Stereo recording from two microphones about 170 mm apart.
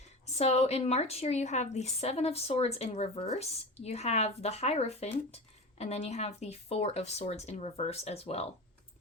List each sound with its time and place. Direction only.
0.3 s a woman's voice: 40° left (ahead or behind)